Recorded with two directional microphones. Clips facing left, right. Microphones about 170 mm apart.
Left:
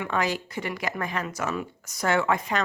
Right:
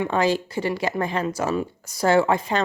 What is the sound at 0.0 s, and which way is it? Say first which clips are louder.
A woman's voice: right 6 dB; 30° right (ahead or behind).